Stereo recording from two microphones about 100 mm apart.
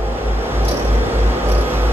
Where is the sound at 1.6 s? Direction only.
20° right (ahead or behind).